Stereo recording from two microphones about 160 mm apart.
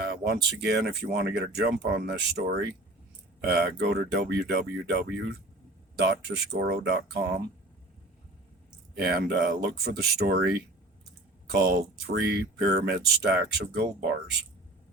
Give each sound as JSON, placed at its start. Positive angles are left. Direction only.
{"t": 0.0, "sound": "speech", "side_deg": -80}
{"t": 9.0, "sound": "speech", "side_deg": -85}
{"t": 11.5, "sound": "speech", "side_deg": -85}